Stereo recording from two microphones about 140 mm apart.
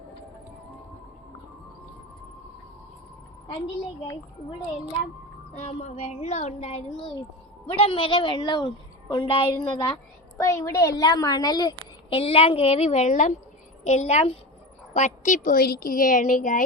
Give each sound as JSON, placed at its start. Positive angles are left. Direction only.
{"t": 5.5, "sound": "a woman's voice", "side_deg": 50}
{"t": 12.1, "sound": "a woman's voice", "side_deg": 40}